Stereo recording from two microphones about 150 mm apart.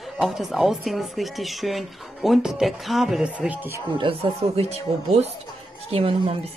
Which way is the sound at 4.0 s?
40° right (ahead or behind).